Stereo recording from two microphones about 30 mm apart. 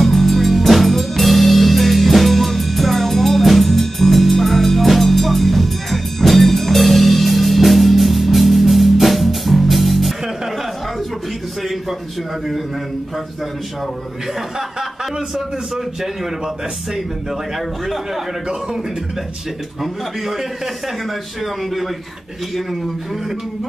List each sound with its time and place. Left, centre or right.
0.0 s music: centre
14.8 s a man's voice: centre
16.9 s a man's voice: centre
19.8 s a man's voice: centre